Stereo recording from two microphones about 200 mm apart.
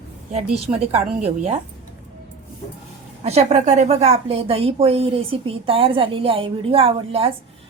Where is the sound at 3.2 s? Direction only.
30° right (ahead or behind).